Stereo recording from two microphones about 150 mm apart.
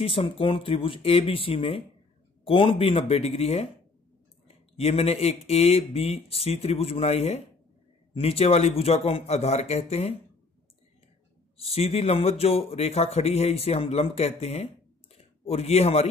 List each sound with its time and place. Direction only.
0.0 s speech: 40° left (ahead or behind)
4.7 s speech: 40° left (ahead or behind)
11.5 s speech: 40° left (ahead or behind)